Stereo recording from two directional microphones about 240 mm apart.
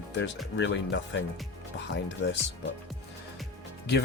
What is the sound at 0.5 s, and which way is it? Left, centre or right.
Speech, left.